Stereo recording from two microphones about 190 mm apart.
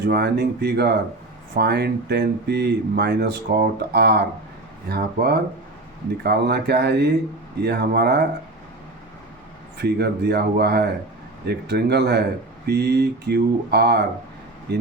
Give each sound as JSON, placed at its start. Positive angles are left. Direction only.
{"t": 0.0, "sound": "speech", "side_deg": -60}
{"t": 9.7, "sound": "speech", "side_deg": -60}